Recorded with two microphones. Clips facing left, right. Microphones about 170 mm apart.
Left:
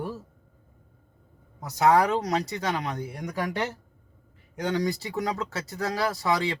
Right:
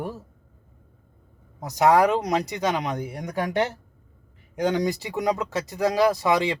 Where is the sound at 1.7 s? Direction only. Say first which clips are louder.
Right 3 dB; 15° right (ahead or behind).